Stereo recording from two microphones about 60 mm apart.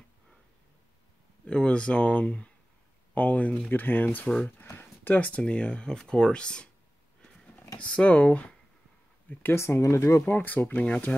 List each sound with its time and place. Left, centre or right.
1.4 s speech: centre
9.3 s speech: left
9.6 s speech: left
10.2 s speech: left